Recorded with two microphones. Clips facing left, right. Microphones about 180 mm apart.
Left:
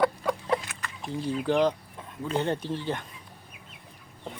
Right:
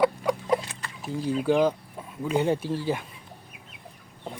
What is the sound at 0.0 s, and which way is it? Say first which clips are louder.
Chicken: right 2 dB; 10° right (ahead or behind).